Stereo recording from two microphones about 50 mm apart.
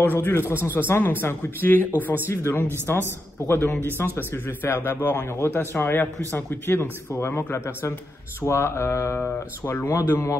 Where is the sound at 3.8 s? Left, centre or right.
Left.